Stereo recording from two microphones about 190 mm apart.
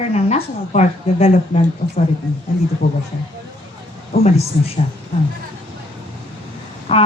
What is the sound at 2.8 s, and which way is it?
Speech, 55° left (ahead or behind).